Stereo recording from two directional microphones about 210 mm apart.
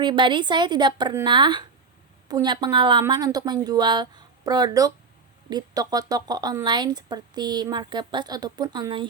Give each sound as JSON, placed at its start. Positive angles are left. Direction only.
{"t": 0.0, "sound": "speech", "side_deg": -20}